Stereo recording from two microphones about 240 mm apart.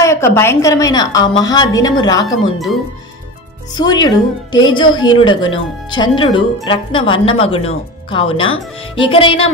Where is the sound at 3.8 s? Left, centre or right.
Centre.